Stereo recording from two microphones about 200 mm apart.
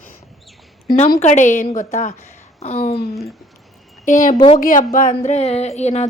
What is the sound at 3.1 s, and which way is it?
Speech, centre (ahead or behind).